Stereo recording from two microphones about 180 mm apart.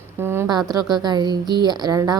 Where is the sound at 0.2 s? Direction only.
15° right (ahead or behind).